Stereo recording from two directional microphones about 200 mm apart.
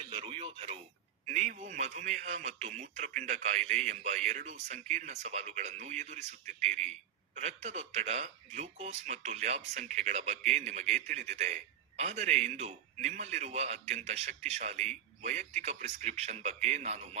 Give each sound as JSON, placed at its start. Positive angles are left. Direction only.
{"t": 0.0, "sound": "speech", "side_deg": -30}